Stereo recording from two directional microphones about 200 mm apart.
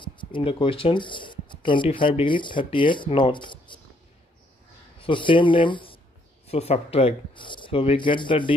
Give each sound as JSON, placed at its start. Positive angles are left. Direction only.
{"t": 0.0, "sound": "speech", "side_deg": 25}
{"t": 5.0, "sound": "speech", "side_deg": 25}